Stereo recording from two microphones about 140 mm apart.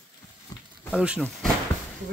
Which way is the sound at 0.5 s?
25° left (ahead or behind).